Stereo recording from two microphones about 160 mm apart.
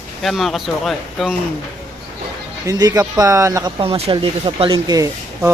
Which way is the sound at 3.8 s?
35° right (ahead or behind).